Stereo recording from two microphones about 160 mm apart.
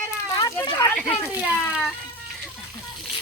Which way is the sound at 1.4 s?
5° right (ahead or behind).